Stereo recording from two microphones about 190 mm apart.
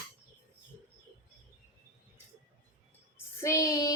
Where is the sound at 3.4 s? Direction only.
15° left (ahead or behind).